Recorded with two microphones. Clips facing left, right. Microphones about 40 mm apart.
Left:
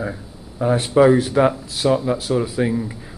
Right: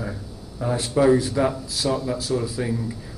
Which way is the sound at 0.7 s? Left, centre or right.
Left.